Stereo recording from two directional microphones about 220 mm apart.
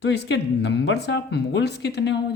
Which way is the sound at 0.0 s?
50° left (ahead or behind).